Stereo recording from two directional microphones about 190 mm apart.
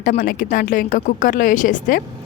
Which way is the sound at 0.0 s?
45° left (ahead or behind).